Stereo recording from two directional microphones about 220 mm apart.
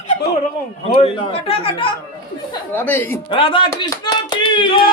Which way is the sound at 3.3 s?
25° left (ahead or behind).